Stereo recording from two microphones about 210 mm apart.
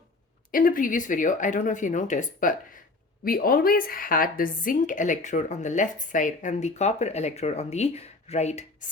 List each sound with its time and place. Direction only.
0.5 s speech: 40° left (ahead or behind)